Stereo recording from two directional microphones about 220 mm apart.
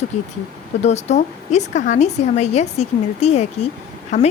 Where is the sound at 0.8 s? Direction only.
30° left (ahead or behind).